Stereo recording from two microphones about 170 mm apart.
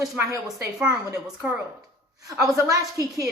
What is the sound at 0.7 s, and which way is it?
A woman's voice, 5° right (ahead or behind).